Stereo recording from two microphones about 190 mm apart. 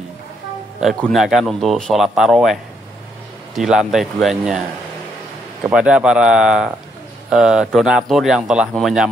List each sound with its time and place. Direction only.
0.7 s speech: centre (ahead or behind)
5.6 s speech: 5° right (ahead or behind)